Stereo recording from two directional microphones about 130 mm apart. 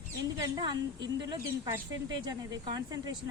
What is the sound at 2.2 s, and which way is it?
Speech, 30° right (ahead or behind).